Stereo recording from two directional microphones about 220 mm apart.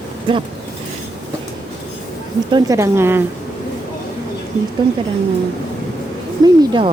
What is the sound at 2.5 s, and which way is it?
Speech, 15° right (ahead or behind).